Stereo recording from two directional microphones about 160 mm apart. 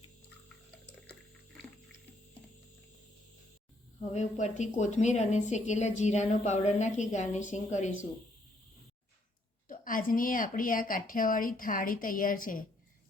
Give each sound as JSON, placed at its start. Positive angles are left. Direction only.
{"t": 4.1, "sound": "a woman's voice", "side_deg": 45}
{"t": 9.6, "sound": "a woman's voice", "side_deg": 60}